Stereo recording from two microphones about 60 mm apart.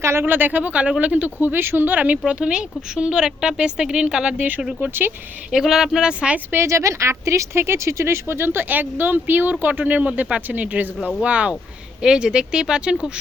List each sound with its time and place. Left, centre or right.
0.0 s speech: right; by 4.4 s centre
4.4 s speech: right
5.5 s speech: centre
6.5 s speech: right; by 13.1 s centre